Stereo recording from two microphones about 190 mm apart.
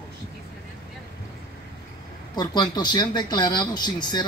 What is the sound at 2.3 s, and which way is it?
Speech, 20° left (ahead or behind).